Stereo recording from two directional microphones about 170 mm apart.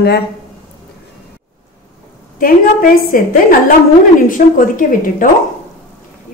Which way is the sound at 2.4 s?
55° left (ahead or behind).